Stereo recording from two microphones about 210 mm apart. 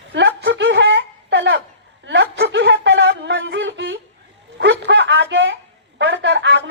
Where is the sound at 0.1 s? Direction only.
55° right (ahead or behind).